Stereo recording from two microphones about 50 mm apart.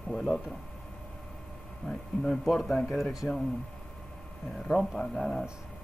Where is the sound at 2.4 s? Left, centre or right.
Centre.